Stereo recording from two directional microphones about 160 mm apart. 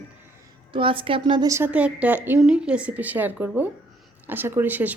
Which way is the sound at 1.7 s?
10° right (ahead or behind).